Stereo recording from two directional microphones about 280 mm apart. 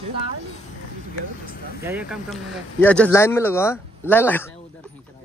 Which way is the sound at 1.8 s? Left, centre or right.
Centre.